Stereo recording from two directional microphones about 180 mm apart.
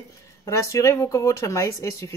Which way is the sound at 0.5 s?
15° left (ahead or behind).